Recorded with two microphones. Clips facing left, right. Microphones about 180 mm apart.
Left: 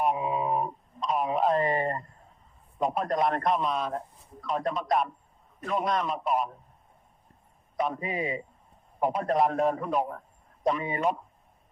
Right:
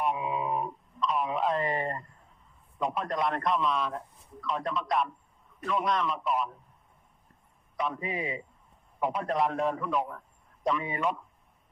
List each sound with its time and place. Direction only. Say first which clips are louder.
0.0 s a sound: left 3 dB; 40° left (ahead or behind)
2.7 s a man's voice: left 4 dB; 45° left (ahead or behind)
7.8 s a man's voice: left 3 dB; 40° left (ahead or behind)